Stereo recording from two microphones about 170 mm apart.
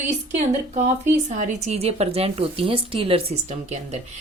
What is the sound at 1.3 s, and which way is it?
A woman's voice, 40° right (ahead or behind).